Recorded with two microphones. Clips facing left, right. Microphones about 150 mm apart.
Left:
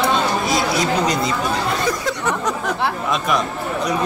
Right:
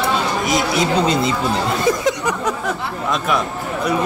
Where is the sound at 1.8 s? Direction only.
20° right (ahead or behind).